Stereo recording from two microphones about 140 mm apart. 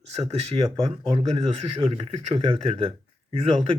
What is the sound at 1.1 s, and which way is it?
A man's voice, 45° right (ahead or behind).